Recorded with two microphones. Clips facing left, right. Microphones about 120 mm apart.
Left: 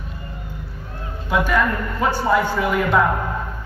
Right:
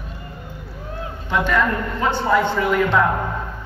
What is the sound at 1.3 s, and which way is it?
Speech, 10° left (ahead or behind).